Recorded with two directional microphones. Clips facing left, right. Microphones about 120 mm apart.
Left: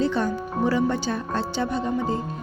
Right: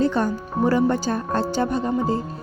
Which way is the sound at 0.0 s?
45° right (ahead or behind).